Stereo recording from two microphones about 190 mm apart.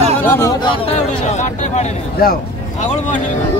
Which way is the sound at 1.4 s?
40° left (ahead or behind).